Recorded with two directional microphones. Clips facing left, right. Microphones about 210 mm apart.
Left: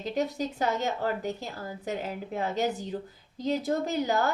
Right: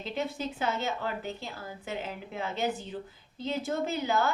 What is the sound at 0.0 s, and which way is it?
A woman's voice, 40° left (ahead or behind).